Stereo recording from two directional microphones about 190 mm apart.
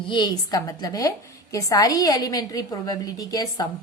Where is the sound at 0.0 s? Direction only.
25° left (ahead or behind).